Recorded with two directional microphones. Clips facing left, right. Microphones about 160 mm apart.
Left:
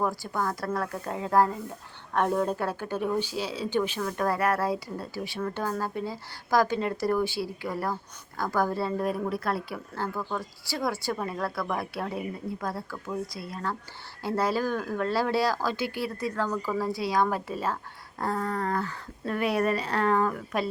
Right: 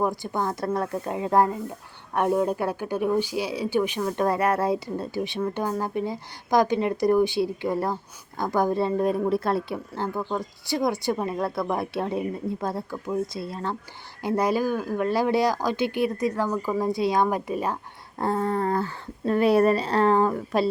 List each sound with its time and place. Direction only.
0.0 s speech: 20° right (ahead or behind)